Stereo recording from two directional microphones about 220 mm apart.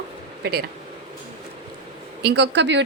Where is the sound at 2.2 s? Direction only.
50° right (ahead or behind).